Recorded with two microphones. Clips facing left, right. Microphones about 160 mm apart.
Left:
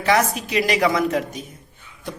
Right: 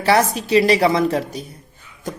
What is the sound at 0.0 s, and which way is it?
Speech, 30° right (ahead or behind).